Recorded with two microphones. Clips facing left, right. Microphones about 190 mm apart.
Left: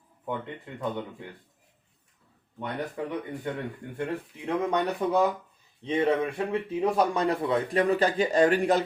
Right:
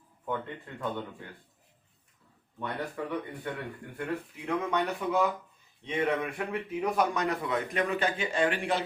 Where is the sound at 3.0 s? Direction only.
20° left (ahead or behind).